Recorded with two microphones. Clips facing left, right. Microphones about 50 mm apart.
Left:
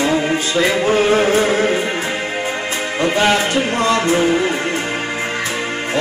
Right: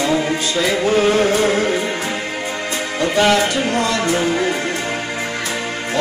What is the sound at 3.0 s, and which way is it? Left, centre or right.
Speech, left.